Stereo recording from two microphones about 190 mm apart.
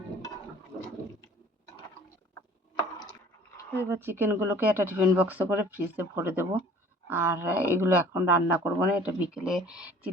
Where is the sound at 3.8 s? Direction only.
10° right (ahead or behind).